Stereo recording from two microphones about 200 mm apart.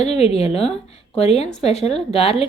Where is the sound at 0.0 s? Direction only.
30° left (ahead or behind).